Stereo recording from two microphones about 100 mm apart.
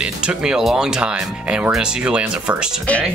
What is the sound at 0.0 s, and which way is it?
Speech, 10° right (ahead or behind).